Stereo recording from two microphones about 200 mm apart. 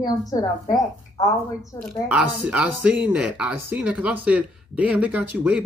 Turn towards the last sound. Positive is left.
turn(degrees=-5)  # may be behind; listen again after turning